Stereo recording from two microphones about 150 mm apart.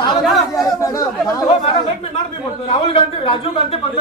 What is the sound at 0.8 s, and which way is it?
Speech, 25° left (ahead or behind).